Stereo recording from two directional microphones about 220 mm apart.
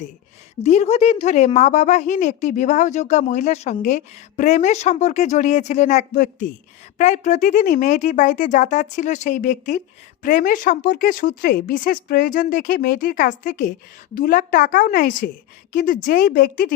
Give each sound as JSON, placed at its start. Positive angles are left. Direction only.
{"t": 0.6, "sound": "speech", "side_deg": 30}